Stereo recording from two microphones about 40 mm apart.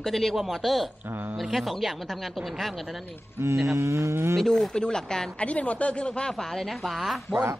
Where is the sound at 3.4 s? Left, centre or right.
Right.